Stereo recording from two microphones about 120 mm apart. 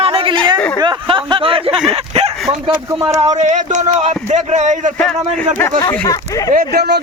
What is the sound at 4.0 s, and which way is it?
Speech, 70° right (ahead or behind).